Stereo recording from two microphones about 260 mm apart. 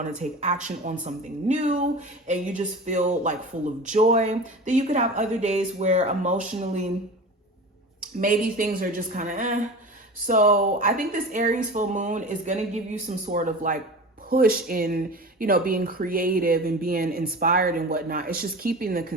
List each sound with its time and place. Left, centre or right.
0.2 s speech: right
8.2 s speech: right